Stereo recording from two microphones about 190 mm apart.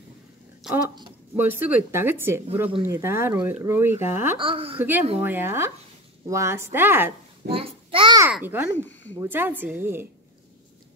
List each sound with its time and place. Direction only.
0.7 s speech: 5° right (ahead or behind)
4.4 s a woman's voice: 30° right (ahead or behind)
4.7 s speech: 10° right (ahead or behind)
7.4 s babbling: 30° right (ahead or behind)
8.2 s speech: 10° right (ahead or behind)
8.7 s speech: 10° left (ahead or behind)
9.2 s speech: 10° right (ahead or behind)